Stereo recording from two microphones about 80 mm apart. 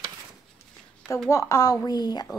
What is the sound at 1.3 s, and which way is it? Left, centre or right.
Speech, left.